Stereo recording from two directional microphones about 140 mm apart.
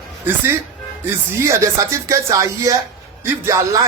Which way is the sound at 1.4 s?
20° right (ahead or behind).